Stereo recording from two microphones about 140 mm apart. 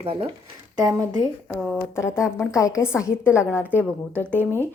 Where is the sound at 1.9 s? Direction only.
20° left (ahead or behind).